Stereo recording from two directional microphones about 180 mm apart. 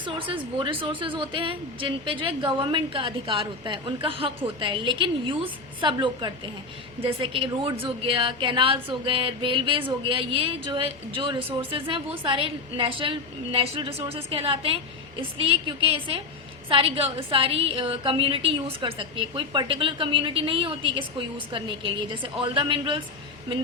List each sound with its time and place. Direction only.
0.0 s a woman's voice: 30° right (ahead or behind)